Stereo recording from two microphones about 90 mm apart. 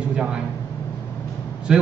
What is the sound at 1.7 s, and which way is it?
Speech, 5° right (ahead or behind).